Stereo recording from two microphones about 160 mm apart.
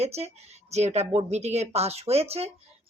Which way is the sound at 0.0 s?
40° right (ahead or behind).